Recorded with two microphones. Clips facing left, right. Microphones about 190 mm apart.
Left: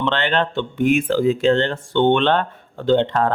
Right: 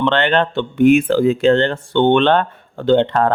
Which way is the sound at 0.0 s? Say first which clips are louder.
Right 4 dB; 60° right (ahead or behind).